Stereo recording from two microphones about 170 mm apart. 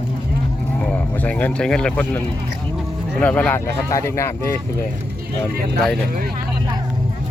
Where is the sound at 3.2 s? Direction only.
10° left (ahead or behind).